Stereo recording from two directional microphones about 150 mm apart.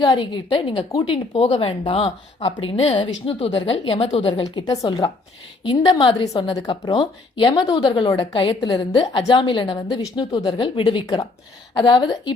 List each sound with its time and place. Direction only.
0.0 s a woman's voice: 30° left (ahead or behind)
0.9 s a woman's voice: 25° left (ahead or behind)
1.1 s a woman's voice: 40° left (ahead or behind)